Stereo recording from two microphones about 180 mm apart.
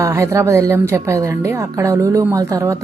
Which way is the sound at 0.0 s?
15° right (ahead or behind).